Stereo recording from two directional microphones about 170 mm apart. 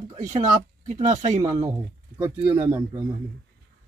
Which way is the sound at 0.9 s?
45° right (ahead or behind).